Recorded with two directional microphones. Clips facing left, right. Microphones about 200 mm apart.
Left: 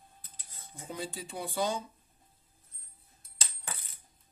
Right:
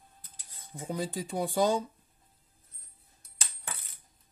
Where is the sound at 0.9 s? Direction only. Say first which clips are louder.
Right 6 dB; 45° right (ahead or behind).